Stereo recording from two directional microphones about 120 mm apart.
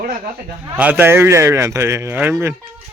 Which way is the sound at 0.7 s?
10° right (ahead or behind).